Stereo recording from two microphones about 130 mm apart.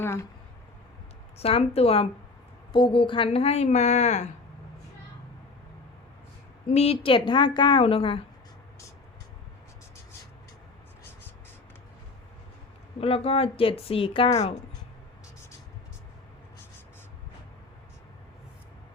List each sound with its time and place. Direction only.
0.0 s a sound: 20° left (ahead or behind)
1.4 s a woman's voice: 50° left (ahead or behind)
6.7 s a woman's voice: 55° left (ahead or behind)
13.0 s a woman's voice: 50° left (ahead or behind)